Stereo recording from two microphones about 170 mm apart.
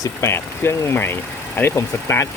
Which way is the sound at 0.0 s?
15° left (ahead or behind).